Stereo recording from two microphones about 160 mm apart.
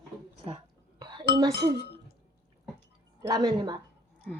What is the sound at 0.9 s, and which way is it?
Chink, 25° right (ahead or behind).